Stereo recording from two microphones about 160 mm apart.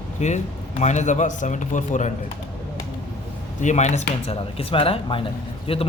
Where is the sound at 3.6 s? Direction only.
45° left (ahead or behind).